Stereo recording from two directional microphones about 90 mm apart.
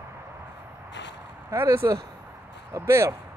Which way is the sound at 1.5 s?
30° right (ahead or behind).